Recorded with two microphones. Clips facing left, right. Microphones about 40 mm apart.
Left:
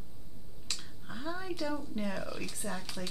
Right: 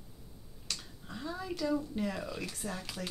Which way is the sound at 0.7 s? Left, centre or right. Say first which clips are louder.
Even; centre.